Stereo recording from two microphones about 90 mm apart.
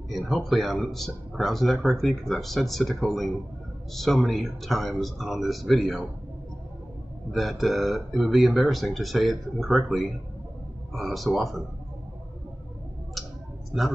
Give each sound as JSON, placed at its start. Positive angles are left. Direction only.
{"t": 0.1, "sound": "speech", "side_deg": 0}
{"t": 7.3, "sound": "speech", "side_deg": 0}